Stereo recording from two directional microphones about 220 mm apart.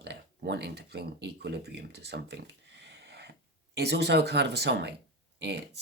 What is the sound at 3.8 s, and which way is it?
Speech, 50° right (ahead or behind).